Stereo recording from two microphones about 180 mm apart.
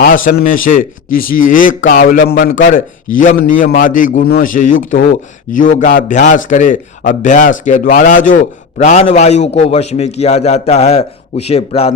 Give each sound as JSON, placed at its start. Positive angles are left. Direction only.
{"t": 0.0, "sound": "a man's voice", "side_deg": 50}